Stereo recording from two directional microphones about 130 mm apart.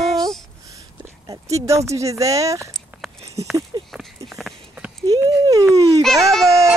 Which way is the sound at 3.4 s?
55° right (ahead or behind).